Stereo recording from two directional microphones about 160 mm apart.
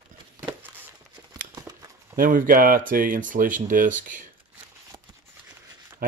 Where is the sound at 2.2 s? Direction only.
60° right (ahead or behind).